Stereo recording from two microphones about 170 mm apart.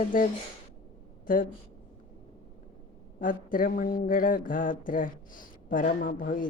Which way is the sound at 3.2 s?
50° left (ahead or behind).